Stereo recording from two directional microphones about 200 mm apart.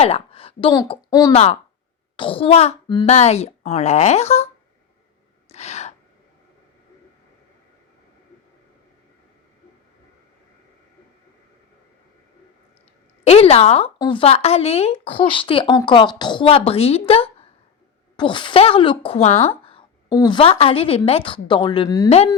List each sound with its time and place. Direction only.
0.0 s a woman's voice: 30° left (ahead or behind)
5.5 s gasp: 30° left (ahead or behind)
13.2 s a woman's voice: 30° left (ahead or behind)